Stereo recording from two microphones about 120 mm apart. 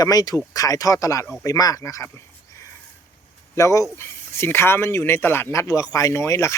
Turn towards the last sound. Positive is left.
turn(degrees=25)  # may be behind; listen again after turning